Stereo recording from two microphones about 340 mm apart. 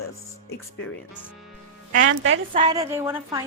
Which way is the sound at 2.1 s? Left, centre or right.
Right.